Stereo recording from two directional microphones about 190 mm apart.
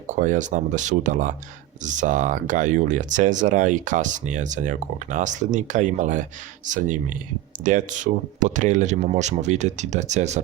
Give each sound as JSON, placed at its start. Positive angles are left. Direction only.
{"t": 0.1, "sound": "speech", "side_deg": -40}